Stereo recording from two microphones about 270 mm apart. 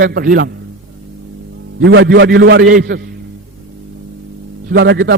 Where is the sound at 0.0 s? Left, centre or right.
Right.